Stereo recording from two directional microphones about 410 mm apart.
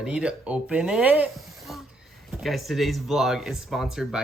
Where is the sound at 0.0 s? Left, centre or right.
Centre.